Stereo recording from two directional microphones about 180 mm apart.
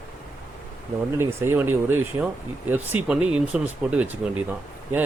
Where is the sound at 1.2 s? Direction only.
15° right (ahead or behind).